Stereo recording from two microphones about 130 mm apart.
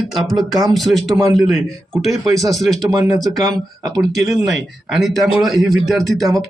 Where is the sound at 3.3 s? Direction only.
30° right (ahead or behind).